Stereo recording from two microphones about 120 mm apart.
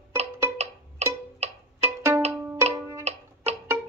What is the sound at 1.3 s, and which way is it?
Music, 65° right (ahead or behind).